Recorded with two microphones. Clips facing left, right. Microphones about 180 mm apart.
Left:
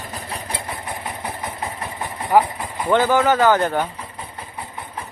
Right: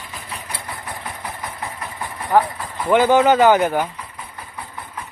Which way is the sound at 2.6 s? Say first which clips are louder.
Even; 15° left (ahead or behind).